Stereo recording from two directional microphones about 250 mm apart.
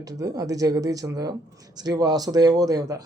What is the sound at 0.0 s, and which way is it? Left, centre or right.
Speech, centre.